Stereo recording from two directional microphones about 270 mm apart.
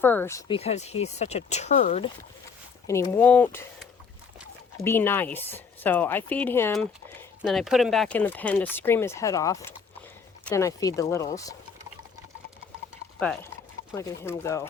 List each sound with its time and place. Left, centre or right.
0.0 s speech: centre; by 2.0 s left
2.8 s speech: centre
13.1 s speech: centre